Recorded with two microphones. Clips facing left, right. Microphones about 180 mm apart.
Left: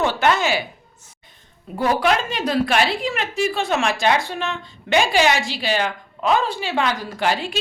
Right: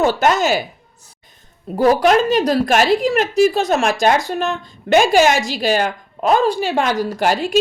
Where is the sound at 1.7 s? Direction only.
40° right (ahead or behind).